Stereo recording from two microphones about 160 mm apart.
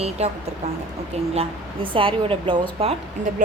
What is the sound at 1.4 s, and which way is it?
Speech, 35° right (ahead or behind).